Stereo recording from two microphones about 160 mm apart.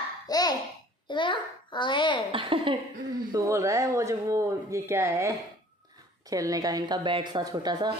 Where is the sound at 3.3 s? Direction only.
20° right (ahead or behind).